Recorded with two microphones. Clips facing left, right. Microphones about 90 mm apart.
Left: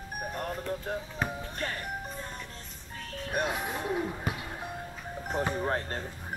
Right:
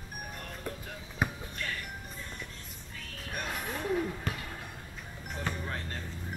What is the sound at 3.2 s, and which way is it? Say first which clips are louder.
Music: left 8 dB; 35° left (ahead or behind).